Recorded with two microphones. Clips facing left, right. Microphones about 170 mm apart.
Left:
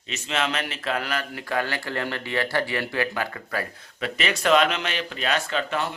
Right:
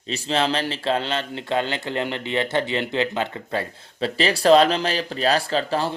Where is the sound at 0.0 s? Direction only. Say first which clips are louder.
Right 5 dB; 35° right (ahead or behind).